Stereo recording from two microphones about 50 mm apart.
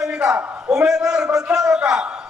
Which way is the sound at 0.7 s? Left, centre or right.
Centre.